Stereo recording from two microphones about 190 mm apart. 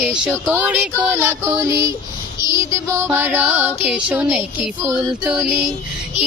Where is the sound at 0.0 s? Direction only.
5° right (ahead or behind).